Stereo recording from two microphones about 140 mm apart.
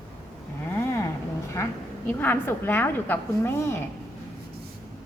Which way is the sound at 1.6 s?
20° left (ahead or behind).